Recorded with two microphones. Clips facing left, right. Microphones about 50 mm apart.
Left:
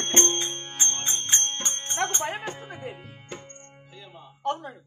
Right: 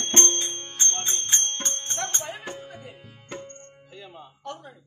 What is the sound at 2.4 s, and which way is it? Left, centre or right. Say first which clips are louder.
Music: left 3 dB; left.